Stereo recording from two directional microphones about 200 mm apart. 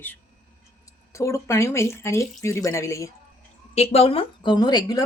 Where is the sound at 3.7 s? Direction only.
30° left (ahead or behind).